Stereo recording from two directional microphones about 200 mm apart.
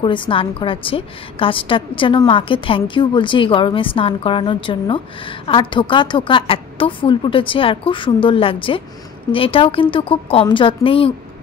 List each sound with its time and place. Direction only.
0.0 s a woman's voice: 25° left (ahead or behind)